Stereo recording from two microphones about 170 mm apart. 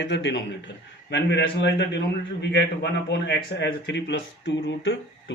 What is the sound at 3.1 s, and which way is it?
Speech, 80° left.